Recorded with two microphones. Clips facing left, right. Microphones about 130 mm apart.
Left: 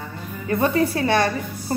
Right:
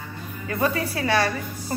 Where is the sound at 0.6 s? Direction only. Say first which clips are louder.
Left 4 dB; 30° left (ahead or behind).